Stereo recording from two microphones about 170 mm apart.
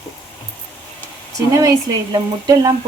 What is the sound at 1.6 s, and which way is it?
Speech, 20° right (ahead or behind).